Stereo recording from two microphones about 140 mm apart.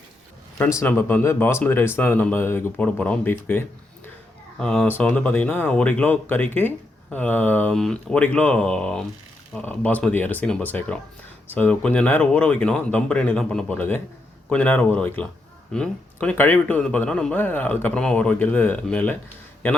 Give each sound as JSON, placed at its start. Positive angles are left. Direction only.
{"t": 0.8, "sound": "speech", "side_deg": 15}
{"t": 4.5, "sound": "speech", "side_deg": 5}